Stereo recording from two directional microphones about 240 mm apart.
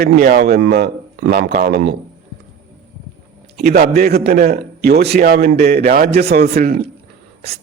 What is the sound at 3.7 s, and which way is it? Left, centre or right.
A man's voice, right.